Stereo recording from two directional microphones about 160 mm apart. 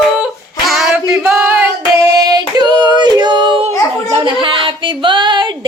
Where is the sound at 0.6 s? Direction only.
5° right (ahead or behind).